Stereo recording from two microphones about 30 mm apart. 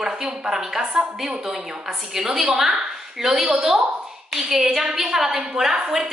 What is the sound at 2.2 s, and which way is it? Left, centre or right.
A woman's voice, centre.